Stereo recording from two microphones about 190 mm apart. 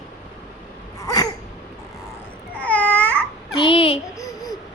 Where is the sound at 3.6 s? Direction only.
30° left (ahead or behind).